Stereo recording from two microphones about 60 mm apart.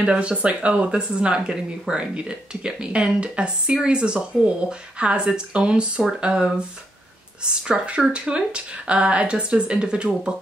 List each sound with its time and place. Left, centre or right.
0.0 s speech: centre
7.6 s speech: centre